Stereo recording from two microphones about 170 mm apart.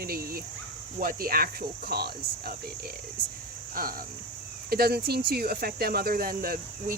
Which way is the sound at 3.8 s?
60° right (ahead or behind).